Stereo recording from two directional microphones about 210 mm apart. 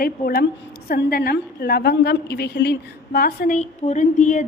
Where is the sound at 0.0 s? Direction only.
45° left (ahead or behind).